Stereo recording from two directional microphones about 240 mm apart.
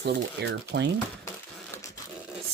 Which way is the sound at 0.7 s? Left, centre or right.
Right.